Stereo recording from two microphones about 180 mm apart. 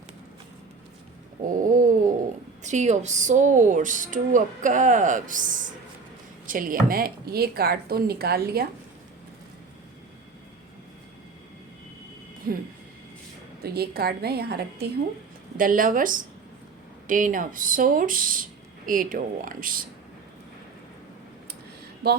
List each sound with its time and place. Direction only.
1.5 s a sound: 50° right (ahead or behind)
2.6 s a woman's voice: 40° right (ahead or behind); by 8.6 s 60° right (ahead or behind)
12.5 s a sound: 55° right (ahead or behind)
13.6 s a woman's voice: 60° right (ahead or behind)
15.5 s speech: 50° right (ahead or behind)
22.0 s a woman's voice: 65° right (ahead or behind)